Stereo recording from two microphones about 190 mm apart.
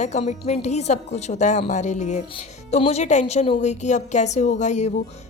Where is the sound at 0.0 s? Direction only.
35° left (ahead or behind).